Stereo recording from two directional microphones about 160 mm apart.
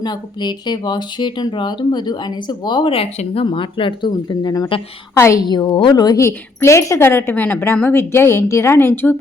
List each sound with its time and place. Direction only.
0.0 s speech: 25° left (ahead or behind)
5.5 s speech: 25° left (ahead or behind)